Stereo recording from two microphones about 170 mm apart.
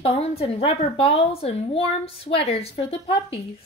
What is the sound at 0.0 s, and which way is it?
A woman's voice, 35° left (ahead or behind).